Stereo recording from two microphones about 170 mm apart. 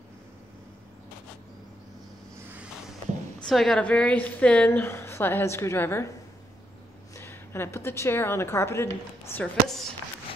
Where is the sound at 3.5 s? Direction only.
Centre (ahead or behind).